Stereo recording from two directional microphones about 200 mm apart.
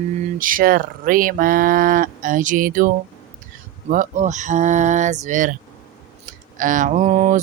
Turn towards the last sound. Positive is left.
turn(degrees=-40)  # may be behind; listen again after turning